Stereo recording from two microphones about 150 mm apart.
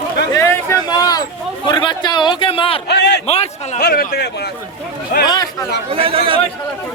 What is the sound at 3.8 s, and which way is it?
Speech, 90° left.